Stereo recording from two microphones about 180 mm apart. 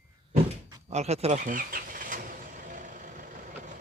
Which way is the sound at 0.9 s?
35° right (ahead or behind).